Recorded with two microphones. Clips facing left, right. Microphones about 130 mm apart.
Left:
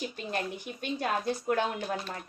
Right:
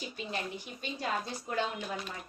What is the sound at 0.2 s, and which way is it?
A woman's voice, 55° left (ahead or behind).